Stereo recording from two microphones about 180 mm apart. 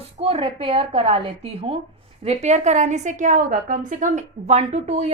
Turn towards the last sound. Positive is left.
turn(degrees=-35)  # may be behind; listen again after turning